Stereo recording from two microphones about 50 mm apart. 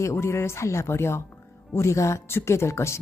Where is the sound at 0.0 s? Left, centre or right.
Left.